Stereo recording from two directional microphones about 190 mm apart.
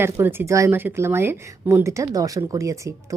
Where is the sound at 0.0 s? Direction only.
10° right (ahead or behind).